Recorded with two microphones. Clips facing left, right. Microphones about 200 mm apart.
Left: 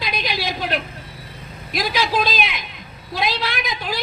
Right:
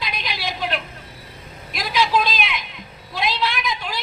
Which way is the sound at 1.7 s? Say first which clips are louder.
Right 1 dB; 35° left (ahead or behind).